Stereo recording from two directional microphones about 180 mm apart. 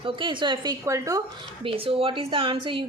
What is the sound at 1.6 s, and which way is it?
A woman's voice, 30° right (ahead or behind).